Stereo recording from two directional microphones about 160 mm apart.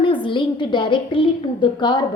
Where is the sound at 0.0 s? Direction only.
30° left (ahead or behind).